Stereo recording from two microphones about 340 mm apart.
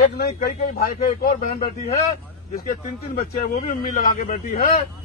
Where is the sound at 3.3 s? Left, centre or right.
Left.